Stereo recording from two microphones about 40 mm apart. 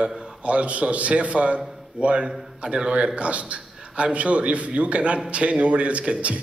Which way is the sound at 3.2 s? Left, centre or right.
Right.